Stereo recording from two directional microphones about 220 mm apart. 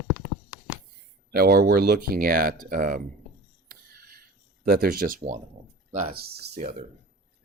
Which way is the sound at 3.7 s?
45° right (ahead or behind).